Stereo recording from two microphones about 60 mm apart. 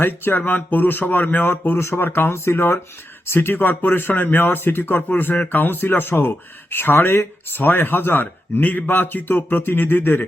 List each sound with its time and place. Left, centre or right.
0.0 s speech: left